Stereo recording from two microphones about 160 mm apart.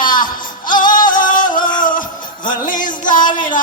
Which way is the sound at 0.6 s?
60° left (ahead or behind).